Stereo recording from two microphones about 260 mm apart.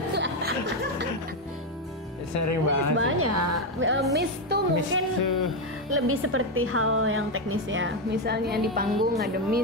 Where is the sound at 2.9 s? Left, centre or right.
Right.